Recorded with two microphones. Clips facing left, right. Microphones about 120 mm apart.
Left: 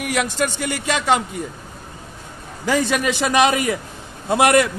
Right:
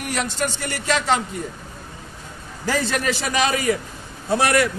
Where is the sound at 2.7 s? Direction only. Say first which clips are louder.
Left 3 dB; 20° left (ahead or behind).